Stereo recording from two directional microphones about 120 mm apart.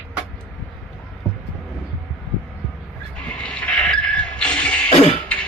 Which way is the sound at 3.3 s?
10° left (ahead or behind).